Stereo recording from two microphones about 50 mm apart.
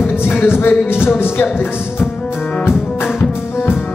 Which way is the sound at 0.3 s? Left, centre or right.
Left.